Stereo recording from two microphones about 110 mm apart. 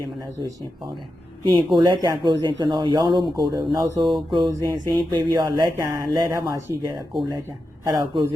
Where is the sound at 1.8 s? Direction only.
40° right (ahead or behind).